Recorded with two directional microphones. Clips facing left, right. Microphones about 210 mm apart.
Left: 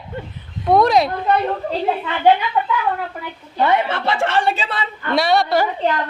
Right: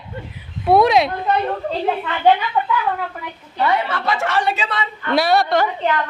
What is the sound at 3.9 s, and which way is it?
A woman's voice, 30° left (ahead or behind).